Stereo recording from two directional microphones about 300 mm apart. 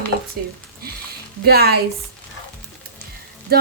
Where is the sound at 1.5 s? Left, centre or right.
Right.